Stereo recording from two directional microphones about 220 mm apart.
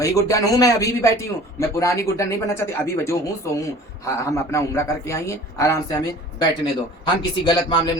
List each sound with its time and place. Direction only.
0.0 s a man's voice: 15° left (ahead or behind)
7.0 s a man's voice: 20° left (ahead or behind)